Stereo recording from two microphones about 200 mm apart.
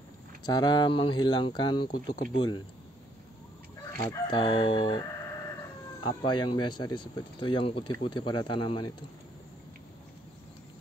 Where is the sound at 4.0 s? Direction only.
20° left (ahead or behind).